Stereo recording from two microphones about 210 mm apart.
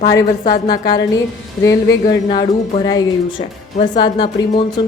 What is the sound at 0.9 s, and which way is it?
Speech, 20° left (ahead or behind).